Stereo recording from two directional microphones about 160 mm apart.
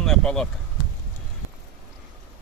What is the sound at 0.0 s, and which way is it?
Speech, 5° left (ahead or behind).